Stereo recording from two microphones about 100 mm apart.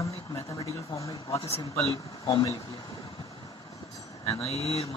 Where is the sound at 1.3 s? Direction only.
75° left (ahead or behind).